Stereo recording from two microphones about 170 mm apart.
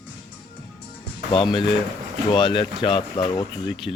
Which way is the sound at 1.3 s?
30° left (ahead or behind).